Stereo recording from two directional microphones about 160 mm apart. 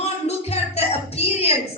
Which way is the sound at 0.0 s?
40° left (ahead or behind).